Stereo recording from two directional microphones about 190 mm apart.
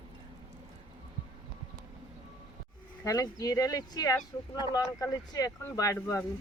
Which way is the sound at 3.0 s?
20° left (ahead or behind).